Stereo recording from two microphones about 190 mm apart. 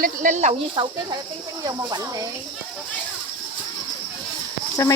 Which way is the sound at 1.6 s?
20° right (ahead or behind).